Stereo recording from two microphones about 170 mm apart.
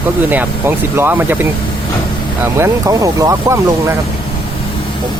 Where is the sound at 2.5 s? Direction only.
15° right (ahead or behind).